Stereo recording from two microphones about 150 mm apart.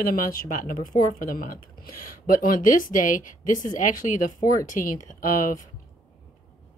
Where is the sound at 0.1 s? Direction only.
65° left (ahead or behind).